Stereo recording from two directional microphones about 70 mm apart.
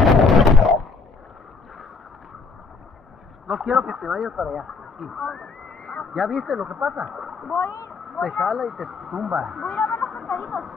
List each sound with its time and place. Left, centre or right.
0.0 s a sound: centre
3.6 s speech: centre
6.1 s speech: centre
7.5 s speech: left
7.9 s speech: centre